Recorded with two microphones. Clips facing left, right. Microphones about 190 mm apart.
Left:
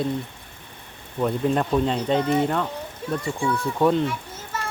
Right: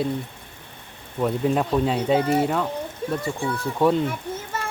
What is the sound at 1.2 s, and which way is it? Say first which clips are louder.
Speech: even; 5° right (ahead or behind).